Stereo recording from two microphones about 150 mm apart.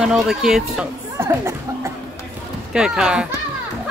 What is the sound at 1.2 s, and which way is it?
Speech, 15° right (ahead or behind).